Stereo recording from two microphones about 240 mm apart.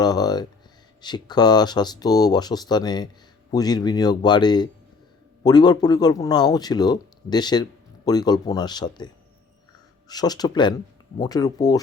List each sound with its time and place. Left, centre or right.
0.0 s speech: centre
10.1 s speech: centre